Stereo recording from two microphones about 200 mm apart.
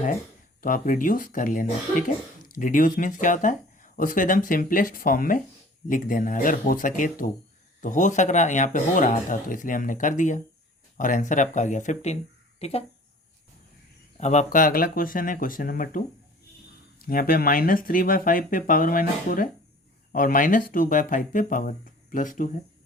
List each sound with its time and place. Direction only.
0.6 s speech: 45° left (ahead or behind)
14.2 s speech: 35° left (ahead or behind)
17.1 s speech: 45° left (ahead or behind)